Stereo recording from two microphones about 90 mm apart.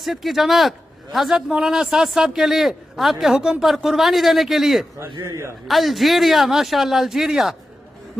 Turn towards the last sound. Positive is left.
turn(degrees=-5)  # may be behind; listen again after turning